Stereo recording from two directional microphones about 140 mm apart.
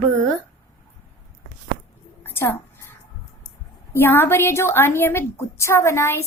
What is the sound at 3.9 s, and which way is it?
A woman's voice, 15° left (ahead or behind).